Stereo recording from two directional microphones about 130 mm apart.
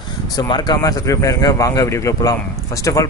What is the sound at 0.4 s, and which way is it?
Speech, 30° left (ahead or behind).